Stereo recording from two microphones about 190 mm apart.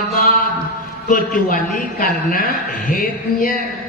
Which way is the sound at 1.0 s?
45° left (ahead or behind).